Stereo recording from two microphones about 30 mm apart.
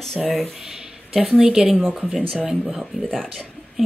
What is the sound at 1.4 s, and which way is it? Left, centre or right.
Speech, right.